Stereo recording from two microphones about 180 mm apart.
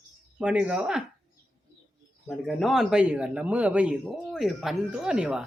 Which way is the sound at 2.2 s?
Centre (ahead or behind).